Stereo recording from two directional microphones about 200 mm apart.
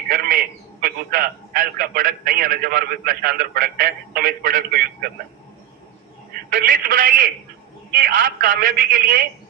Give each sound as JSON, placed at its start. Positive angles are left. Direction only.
{"t": 0.1, "sound": "a man's voice", "side_deg": -45}
{"t": 6.3, "sound": "a man's voice", "side_deg": -45}